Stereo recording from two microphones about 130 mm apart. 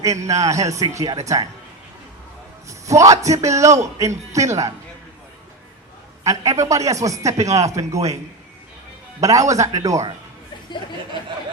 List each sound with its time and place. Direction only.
0.0 s a man's voice: 25° right (ahead or behind)
2.6 s a man's voice: 25° right (ahead or behind)
6.2 s a man's voice: 25° right (ahead or behind)
9.2 s a man's voice: 25° right (ahead or behind)